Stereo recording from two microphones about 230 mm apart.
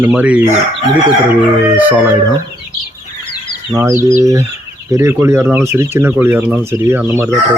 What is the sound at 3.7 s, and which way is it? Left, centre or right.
Speech, centre.